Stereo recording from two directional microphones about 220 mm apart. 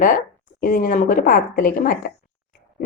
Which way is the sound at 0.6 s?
40° left (ahead or behind).